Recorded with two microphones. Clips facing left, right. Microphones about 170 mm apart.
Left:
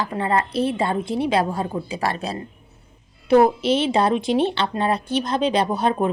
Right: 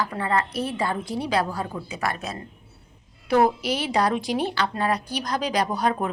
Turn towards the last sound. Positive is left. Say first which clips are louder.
# left 4 dB
turn(degrees=25)  # may be behind; listen again after turning